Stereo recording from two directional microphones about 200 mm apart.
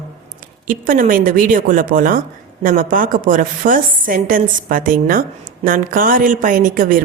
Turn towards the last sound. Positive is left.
turn(degrees=-45)  # may be behind; listen again after turning